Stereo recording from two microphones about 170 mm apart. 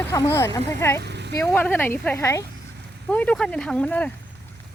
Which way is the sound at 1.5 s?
10° left (ahead or behind).